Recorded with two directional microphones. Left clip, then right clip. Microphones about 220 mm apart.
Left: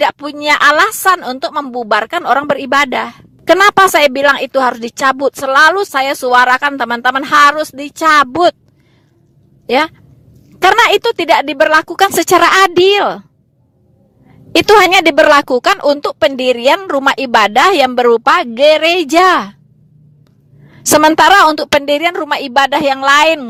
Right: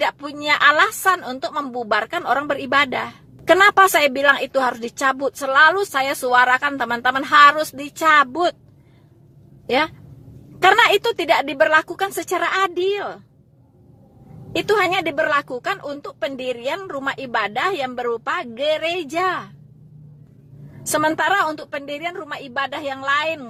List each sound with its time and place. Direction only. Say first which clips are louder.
0.0 s a woman's voice: left 8 dB; 45° left (ahead or behind)
9.6 s a woman's voice: left 7 dB; 45° left (ahead or behind)
14.5 s a woman's voice: left 12 dB; 45° left (ahead or behind)
21.0 s a woman's voice: left 12 dB; 45° left (ahead or behind)